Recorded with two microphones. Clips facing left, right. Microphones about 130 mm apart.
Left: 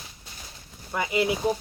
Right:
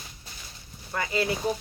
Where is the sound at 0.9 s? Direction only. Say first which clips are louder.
Left 3 dB; 15° left (ahead or behind).